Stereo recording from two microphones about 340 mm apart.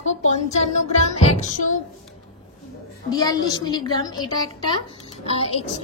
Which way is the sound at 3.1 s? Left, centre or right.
Centre.